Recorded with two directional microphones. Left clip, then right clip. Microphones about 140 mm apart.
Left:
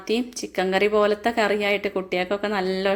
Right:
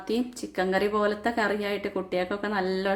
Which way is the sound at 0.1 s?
15° left (ahead or behind).